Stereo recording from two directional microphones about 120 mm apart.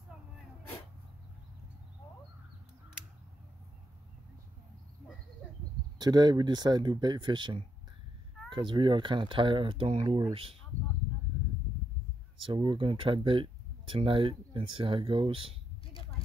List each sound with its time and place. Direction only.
5.9 s speech: 35° right (ahead or behind); by 10.6 s 50° right (ahead or behind)
12.4 s speech: 45° right (ahead or behind)